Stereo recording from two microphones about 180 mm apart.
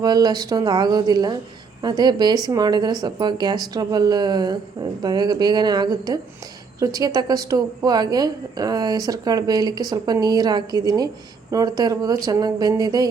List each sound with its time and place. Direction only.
0.0 s a woman's voice: 20° right (ahead or behind)